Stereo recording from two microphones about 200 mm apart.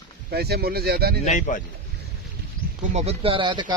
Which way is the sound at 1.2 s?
40° left (ahead or behind).